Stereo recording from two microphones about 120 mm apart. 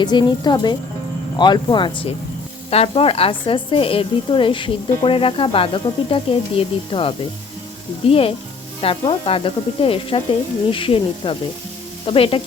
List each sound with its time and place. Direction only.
0.0 s speech: 40° left (ahead or behind)
2.6 s speech: 55° left (ahead or behind)